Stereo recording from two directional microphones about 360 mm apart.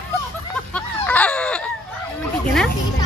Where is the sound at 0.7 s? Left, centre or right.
Centre.